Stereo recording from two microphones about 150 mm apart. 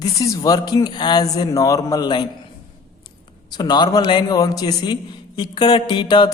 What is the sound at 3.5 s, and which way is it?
A man's voice, 30° left (ahead or behind).